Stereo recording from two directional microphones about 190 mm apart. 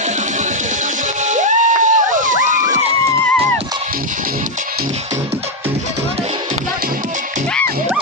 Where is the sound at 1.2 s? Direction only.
40° right (ahead or behind).